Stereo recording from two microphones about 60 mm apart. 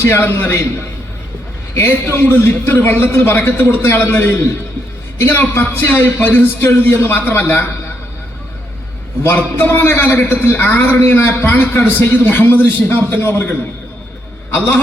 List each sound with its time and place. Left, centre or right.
0.0 s a man's voice: left
1.7 s a man's voice: left
4.1 s a man's voice: left
9.2 s a man's voice: left